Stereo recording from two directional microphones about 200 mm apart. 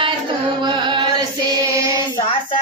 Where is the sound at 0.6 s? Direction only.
25° right (ahead or behind).